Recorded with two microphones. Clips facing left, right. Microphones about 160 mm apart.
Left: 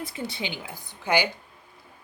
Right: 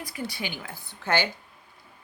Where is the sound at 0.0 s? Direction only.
25° left (ahead or behind).